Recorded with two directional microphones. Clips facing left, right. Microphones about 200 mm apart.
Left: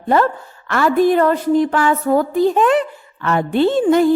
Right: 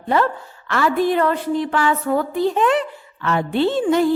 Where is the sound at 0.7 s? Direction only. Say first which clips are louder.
Left 4 dB; 45° left (ahead or behind).